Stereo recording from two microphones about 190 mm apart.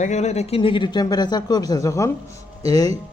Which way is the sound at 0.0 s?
35° left (ahead or behind).